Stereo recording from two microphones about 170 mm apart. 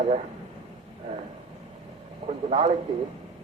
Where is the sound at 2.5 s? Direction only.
30° right (ahead or behind).